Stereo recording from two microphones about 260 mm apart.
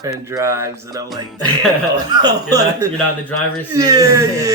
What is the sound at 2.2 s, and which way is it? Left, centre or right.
Speech, centre.